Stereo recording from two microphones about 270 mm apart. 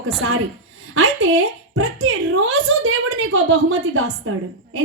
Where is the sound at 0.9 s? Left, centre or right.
Right.